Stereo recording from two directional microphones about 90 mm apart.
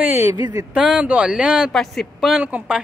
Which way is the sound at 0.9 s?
10° right (ahead or behind).